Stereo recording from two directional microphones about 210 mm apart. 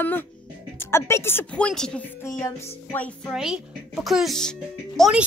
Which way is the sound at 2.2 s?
15° left (ahead or behind).